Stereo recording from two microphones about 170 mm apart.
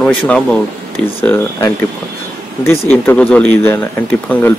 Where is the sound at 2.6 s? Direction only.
15° left (ahead or behind).